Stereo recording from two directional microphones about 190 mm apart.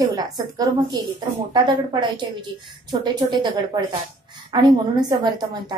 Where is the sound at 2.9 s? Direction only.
20° right (ahead or behind).